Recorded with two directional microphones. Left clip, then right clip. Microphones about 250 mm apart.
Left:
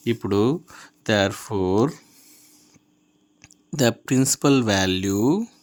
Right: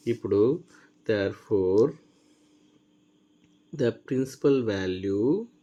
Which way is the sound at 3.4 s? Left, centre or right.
Left.